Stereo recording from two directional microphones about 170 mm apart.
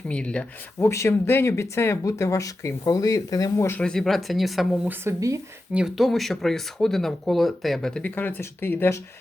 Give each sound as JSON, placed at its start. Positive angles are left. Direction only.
{"t": 0.1, "sound": "speech", "side_deg": 5}
{"t": 4.9, "sound": "speech", "side_deg": -15}
{"t": 5.7, "sound": "speech", "side_deg": 0}